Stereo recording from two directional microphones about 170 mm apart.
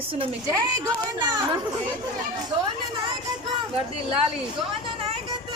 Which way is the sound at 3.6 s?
30° right (ahead or behind).